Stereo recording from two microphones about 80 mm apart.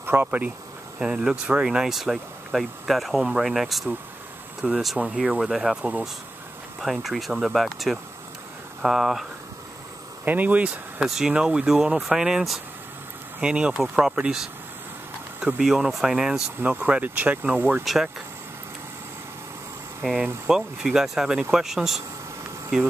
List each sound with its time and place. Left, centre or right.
0.0 s speech: right; by 9.2 s centre
10.2 s speech: right
11.1 s speech: centre
15.4 s speech: centre
16.6 s speech: centre
17.8 s speech: centre
20.4 s speech: centre